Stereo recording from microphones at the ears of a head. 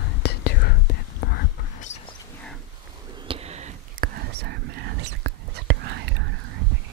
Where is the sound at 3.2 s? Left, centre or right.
Right.